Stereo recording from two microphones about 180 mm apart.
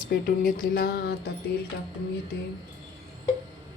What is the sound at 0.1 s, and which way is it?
Speech, 50° left (ahead or behind).